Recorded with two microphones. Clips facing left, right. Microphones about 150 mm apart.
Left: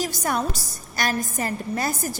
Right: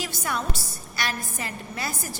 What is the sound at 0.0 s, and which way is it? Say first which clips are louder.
A woman's voice: left 5 dB; 40° left (ahead or behind).